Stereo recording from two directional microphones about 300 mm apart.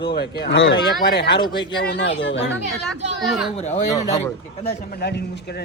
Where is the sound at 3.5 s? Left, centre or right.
Left.